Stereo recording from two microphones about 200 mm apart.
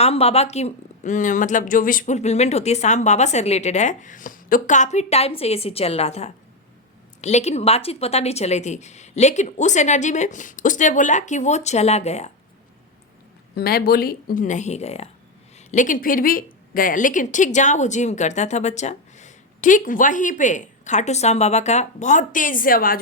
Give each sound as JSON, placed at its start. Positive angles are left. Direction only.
{"t": 0.0, "sound": "speech", "side_deg": 30}
{"t": 13.6, "sound": "speech", "side_deg": 50}